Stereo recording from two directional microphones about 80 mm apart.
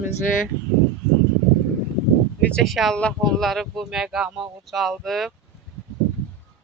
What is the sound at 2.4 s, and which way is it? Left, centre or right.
Speech, centre.